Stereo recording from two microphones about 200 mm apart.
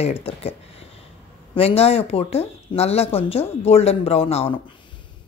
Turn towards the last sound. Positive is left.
turn(degrees=30)  # may be behind; listen again after turning